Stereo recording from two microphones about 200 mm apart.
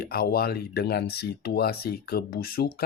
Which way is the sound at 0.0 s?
50° left (ahead or behind).